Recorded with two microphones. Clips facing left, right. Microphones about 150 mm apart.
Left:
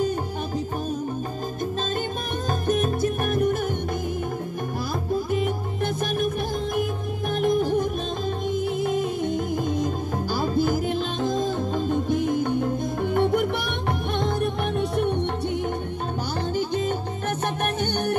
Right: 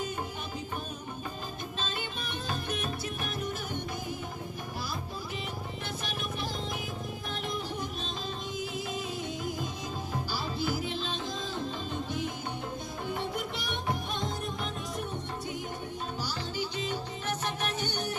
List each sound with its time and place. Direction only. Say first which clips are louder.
2.6 s music: left 12 dB; 45° left (ahead or behind)
5.1 s music: left 14 dB; 50° left (ahead or behind)
16.5 s music: left 11 dB; 50° left (ahead or behind)